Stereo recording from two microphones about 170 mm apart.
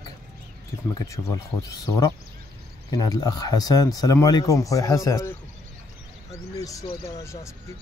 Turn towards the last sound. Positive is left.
turn(degrees=15)  # may be behind; listen again after turning